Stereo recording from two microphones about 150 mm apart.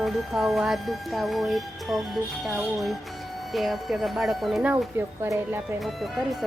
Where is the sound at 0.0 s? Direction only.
Centre (ahead or behind).